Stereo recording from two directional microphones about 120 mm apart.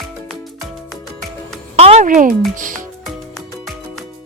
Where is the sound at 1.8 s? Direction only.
80° right.